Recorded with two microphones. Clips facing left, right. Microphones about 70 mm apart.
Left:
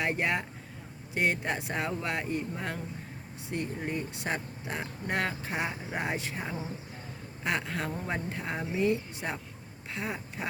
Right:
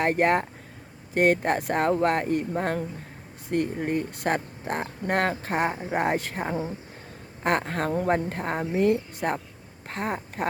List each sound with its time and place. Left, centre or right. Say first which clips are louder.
0.0 s speech: right 8 dB; right